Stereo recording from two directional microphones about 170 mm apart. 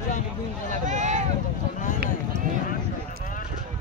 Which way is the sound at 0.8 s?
45° right (ahead or behind).